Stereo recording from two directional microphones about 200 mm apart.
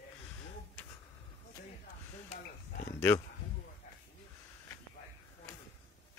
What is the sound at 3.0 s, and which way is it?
Speech, 15° left (ahead or behind).